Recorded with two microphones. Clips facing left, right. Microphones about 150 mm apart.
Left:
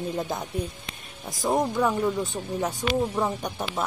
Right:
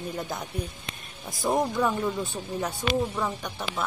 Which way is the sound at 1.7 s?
5° left (ahead or behind).